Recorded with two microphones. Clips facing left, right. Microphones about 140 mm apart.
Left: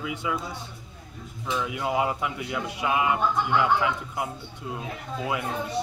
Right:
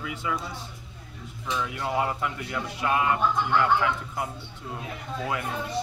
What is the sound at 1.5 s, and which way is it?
A man's voice, 15° left (ahead or behind).